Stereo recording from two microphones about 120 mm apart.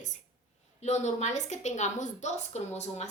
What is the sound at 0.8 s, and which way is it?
A woman's voice, 70° left (ahead or behind).